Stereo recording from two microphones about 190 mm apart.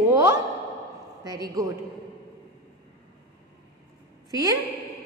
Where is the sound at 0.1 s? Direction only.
20° right (ahead or behind).